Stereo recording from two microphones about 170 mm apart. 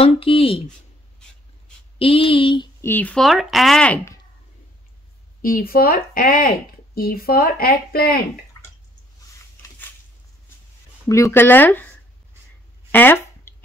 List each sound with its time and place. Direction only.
0.0 s speech: 35° left (ahead or behind)
2.0 s speech: 35° left (ahead or behind)
2.8 s speech: 10° left (ahead or behind)
5.4 s a woman's voice: 60° left (ahead or behind)
11.1 s speech: 20° left (ahead or behind)
12.9 s a sound: 10° left (ahead or behind)